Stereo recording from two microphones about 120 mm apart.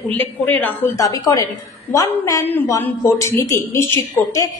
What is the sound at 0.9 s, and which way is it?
A woman's voice, 30° left (ahead or behind).